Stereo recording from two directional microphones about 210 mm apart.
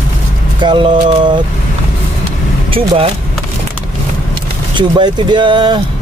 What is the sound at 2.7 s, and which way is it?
Speech, 25° right (ahead or behind).